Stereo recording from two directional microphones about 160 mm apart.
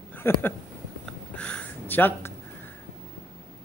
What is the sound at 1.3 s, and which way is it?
Gasp, 5° left (ahead or behind).